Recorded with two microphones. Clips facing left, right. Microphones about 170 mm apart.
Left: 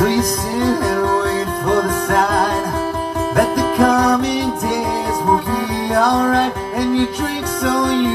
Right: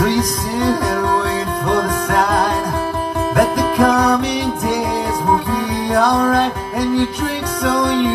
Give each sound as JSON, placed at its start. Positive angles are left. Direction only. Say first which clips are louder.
{"t": 3.3, "sound": "music", "louder": "even", "side_deg": 40}